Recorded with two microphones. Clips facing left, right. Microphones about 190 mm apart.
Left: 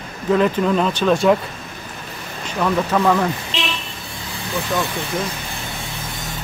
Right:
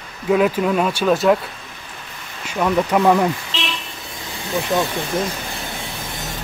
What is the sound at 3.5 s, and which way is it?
Vehicle, 15° left (ahead or behind).